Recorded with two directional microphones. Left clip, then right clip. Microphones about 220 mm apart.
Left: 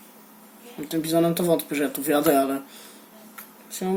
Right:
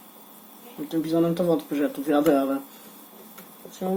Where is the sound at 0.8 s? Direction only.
30° left (ahead or behind).